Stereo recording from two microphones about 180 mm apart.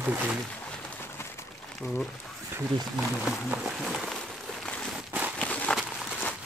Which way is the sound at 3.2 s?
5° right (ahead or behind).